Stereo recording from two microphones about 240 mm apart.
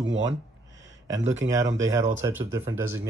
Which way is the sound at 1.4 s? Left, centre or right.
Right.